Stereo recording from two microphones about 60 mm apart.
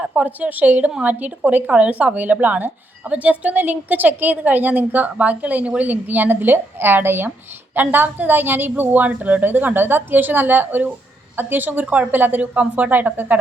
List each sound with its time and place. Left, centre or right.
0.0 s a woman's voice: centre